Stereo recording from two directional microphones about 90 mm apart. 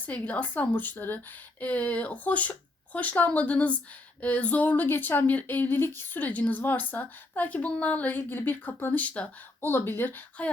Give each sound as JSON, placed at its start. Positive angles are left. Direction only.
{"t": 0.0, "sound": "speech", "side_deg": 20}